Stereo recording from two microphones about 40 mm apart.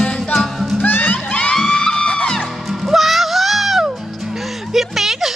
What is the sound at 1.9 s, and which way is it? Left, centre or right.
Music, left.